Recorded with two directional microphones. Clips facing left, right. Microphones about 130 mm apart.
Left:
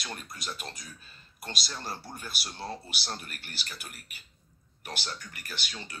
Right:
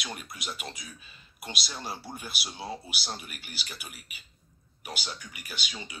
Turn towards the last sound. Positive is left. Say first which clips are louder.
# right 1 dB
turn(degrees=-10)  # may be behind; listen again after turning